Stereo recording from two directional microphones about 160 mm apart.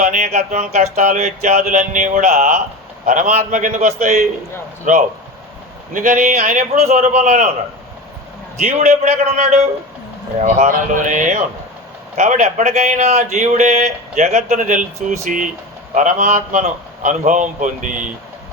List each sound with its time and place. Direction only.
0.0 s a man's voice: 45° right (ahead or behind)
8.5 s a man's voice: 50° right (ahead or behind)